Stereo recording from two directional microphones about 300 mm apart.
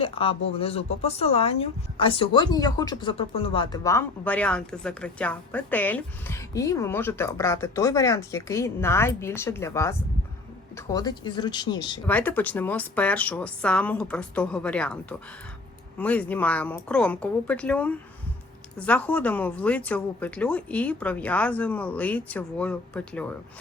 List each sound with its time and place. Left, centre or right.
0.0 s speech: centre